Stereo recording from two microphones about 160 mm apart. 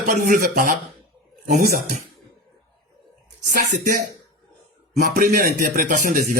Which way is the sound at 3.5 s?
60° right (ahead or behind).